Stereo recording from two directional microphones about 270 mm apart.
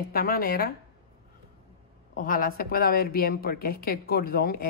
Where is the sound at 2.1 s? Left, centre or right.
Left.